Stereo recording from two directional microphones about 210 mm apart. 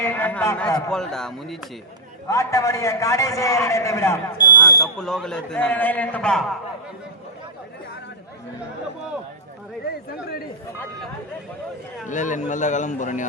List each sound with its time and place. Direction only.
0.0 s a man's voice: 10° left (ahead or behind)
2.2 s a man's voice: 15° left (ahead or behind)
4.9 s speech: 5° left (ahead or behind)
12.0 s a man's voice: 35° left (ahead or behind)